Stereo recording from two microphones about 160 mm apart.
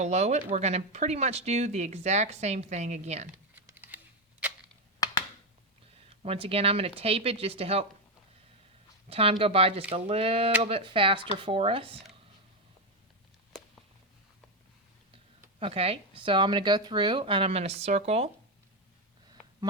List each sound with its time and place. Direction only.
0.0 s speech: 45° right (ahead or behind)
3.5 s a sound: 10° right (ahead or behind)
6.2 s speech: 35° right (ahead or behind)
9.0 s a woman's voice: 35° right (ahead or behind)
15.5 s speech: 35° right (ahead or behind)